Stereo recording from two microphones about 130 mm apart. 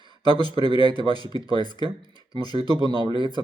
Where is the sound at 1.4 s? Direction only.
35° left (ahead or behind).